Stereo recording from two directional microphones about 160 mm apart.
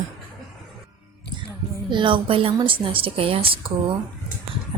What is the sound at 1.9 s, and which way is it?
Speech, 30° right (ahead or behind).